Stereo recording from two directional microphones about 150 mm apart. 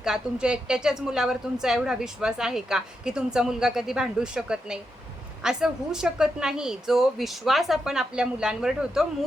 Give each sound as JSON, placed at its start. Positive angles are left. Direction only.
{"t": 0.0, "sound": "a woman's voice", "side_deg": -5}